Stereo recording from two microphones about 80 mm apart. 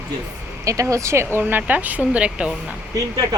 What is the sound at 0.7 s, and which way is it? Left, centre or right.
Speech, right.